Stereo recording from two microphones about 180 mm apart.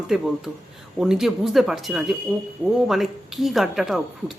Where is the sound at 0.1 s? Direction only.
Centre (ahead or behind).